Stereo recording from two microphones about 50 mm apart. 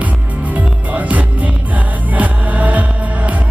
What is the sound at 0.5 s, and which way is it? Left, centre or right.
Music, right.